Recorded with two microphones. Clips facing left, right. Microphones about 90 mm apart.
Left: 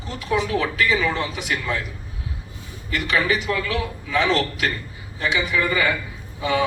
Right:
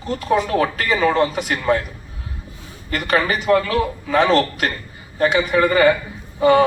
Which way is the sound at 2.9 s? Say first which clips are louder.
Right 2 dB; 45° right (ahead or behind).